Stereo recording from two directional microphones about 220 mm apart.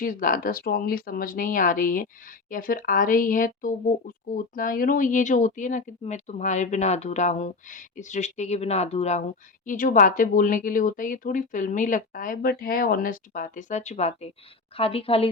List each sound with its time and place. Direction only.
0.0 s a woman's voice: 40° left (ahead or behind)